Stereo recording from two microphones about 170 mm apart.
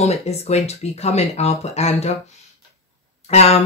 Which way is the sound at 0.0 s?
40° left (ahead or behind).